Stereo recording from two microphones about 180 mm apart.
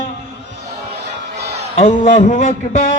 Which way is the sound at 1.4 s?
35° right (ahead or behind).